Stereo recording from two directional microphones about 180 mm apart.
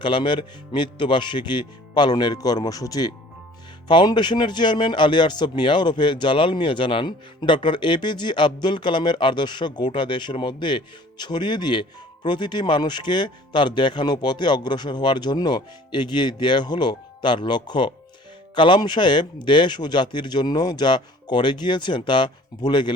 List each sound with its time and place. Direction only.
0.0 s speech: 25° left (ahead or behind)